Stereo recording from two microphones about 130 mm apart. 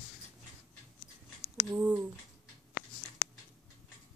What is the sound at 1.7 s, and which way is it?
Speech, 20° right (ahead or behind).